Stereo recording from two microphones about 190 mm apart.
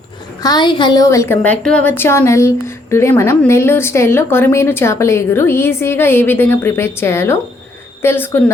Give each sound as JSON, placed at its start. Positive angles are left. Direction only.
{"t": 0.4, "sound": "a woman's voice", "side_deg": 25}
{"t": 1.4, "sound": "speech", "side_deg": 5}